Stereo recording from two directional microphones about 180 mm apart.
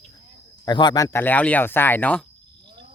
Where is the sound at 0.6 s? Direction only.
25° left (ahead or behind); by 2.2 s 10° left (ahead or behind).